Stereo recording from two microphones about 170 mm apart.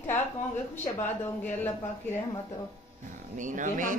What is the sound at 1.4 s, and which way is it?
Speech, 10° left (ahead or behind).